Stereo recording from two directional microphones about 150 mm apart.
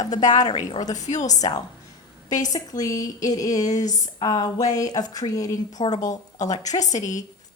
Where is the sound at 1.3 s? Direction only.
25° left (ahead or behind).